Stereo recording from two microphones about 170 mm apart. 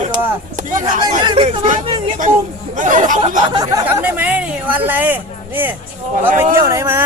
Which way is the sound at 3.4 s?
25° right (ahead or behind).